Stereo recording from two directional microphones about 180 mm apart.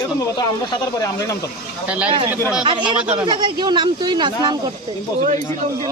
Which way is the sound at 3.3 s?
25° right (ahead or behind).